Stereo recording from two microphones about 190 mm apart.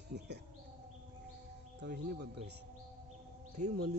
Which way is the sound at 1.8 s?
60° right (ahead or behind).